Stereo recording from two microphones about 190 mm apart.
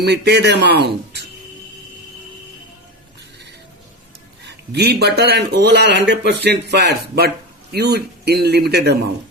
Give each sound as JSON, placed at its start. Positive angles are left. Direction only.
{"t": 0.0, "sound": "speech", "side_deg": -60}
{"t": 4.4, "sound": "speech", "side_deg": -60}